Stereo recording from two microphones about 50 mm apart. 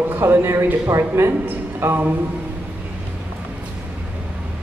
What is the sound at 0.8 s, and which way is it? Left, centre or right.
A man's voice, right.